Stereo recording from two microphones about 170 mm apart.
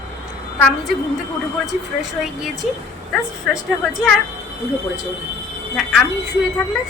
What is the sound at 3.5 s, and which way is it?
Speech, 5° right (ahead or behind).